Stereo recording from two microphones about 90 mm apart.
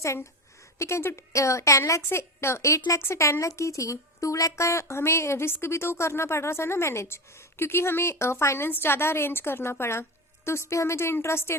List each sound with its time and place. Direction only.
0.0 s a woman's voice: 35° left (ahead or behind)